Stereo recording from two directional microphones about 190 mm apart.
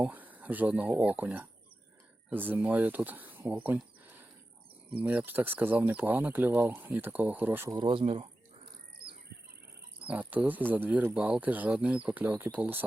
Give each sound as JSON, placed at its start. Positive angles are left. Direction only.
{"t": 0.0, "sound": "speech", "side_deg": -10}
{"t": 7.8, "sound": "speech", "side_deg": -25}
{"t": 10.0, "sound": "speech", "side_deg": -5}